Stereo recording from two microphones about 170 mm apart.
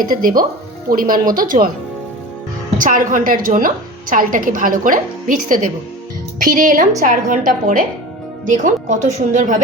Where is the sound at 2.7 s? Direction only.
50° right (ahead or behind).